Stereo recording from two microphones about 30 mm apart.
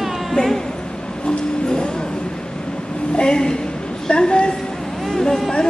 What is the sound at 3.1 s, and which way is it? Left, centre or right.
A woman's voice, left.